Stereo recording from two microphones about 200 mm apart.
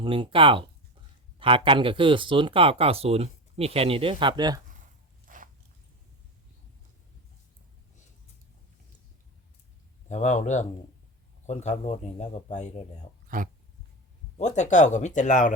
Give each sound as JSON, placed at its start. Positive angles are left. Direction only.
{"t": 0.0, "sound": "speech", "side_deg": -25}
{"t": 5.2, "sound": "a sound", "side_deg": -40}
{"t": 10.1, "sound": "speech", "side_deg": 35}
{"t": 13.2, "sound": "speech", "side_deg": -40}
{"t": 14.3, "sound": "speech", "side_deg": 35}